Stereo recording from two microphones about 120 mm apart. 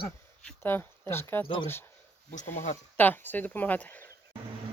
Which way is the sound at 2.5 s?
90° left.